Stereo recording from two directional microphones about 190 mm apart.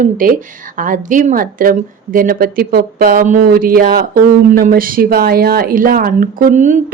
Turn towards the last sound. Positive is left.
turn(degrees=-40)  # may be behind; listen again after turning